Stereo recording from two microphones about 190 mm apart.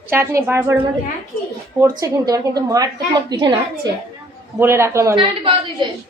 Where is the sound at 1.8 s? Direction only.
20° right (ahead or behind).